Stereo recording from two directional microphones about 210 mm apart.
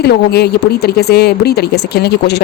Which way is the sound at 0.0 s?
50° left (ahead or behind).